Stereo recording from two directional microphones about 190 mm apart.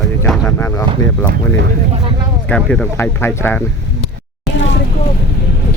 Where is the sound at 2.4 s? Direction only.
5° left (ahead or behind).